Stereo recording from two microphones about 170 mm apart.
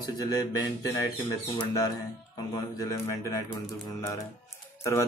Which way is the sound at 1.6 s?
25° left (ahead or behind).